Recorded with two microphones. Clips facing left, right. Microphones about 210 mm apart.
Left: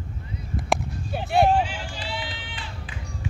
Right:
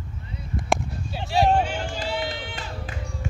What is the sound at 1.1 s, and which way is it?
Vehicle, 55° left (ahead or behind).